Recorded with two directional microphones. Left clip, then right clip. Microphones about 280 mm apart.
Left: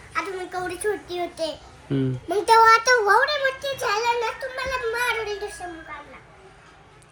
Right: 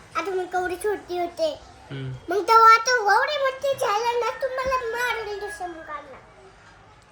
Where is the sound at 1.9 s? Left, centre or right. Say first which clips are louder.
Left 3 dB; centre.